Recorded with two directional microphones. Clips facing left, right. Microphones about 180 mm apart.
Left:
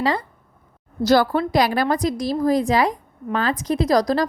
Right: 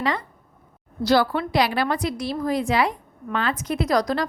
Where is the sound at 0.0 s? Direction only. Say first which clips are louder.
Left 3 dB; 30° left (ahead or behind).